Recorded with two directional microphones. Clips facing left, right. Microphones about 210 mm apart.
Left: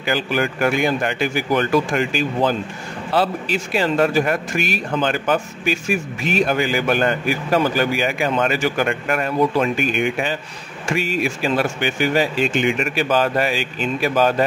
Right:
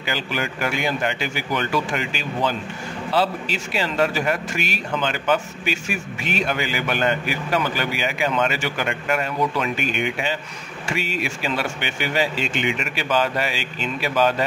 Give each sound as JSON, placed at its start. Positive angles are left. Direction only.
{"t": 0.0, "sound": "speech", "side_deg": 50}